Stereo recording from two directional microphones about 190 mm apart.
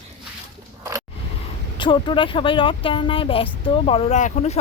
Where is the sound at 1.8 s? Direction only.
25° left (ahead or behind).